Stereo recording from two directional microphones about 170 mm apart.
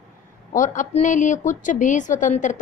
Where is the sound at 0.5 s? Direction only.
50° left (ahead or behind).